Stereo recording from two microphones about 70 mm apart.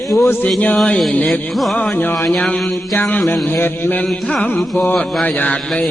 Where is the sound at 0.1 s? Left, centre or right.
Centre.